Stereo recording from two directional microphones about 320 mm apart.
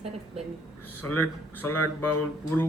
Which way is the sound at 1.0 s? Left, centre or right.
Left.